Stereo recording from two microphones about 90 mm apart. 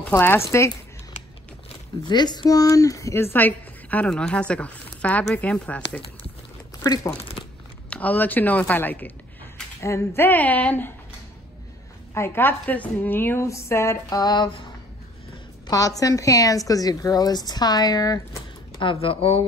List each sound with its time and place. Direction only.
0.1 s speech: 25° left (ahead or behind)
2.0 s a woman's voice: 50° left (ahead or behind)
2.6 s speech: 40° left (ahead or behind)
3.3 s a woman's voice: 20° left (ahead or behind)
6.8 s speech: 35° left (ahead or behind)
7.9 s a woman's voice: 20° left (ahead or behind)
9.8 s a woman's voice: 35° left (ahead or behind); by 10.9 s 15° left (ahead or behind)
12.1 s a woman's voice: 30° left (ahead or behind)
14.0 s a woman's voice: 50° left (ahead or behind)
15.6 s a sound: 40° left (ahead or behind)
16.0 s a woman's voice: 40° left (ahead or behind)
18.8 s speech: 80° left